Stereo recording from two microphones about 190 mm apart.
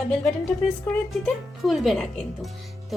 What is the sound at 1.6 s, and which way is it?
Speech, centre (ahead or behind).